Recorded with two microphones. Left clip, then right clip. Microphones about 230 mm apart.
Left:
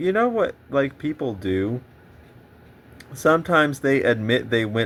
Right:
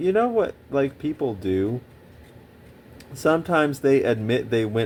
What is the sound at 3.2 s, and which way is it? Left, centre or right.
Speech, centre.